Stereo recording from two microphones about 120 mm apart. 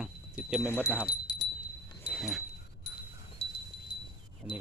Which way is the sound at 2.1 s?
Centre (ahead or behind).